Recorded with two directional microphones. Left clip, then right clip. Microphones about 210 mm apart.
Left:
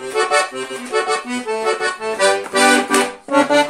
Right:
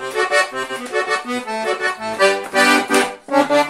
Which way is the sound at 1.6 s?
10° left (ahead or behind).